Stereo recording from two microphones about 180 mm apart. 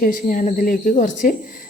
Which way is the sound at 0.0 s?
45° left (ahead or behind).